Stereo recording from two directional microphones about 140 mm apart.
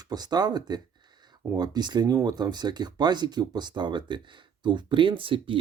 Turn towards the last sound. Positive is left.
turn(degrees=-40)  # may be behind; listen again after turning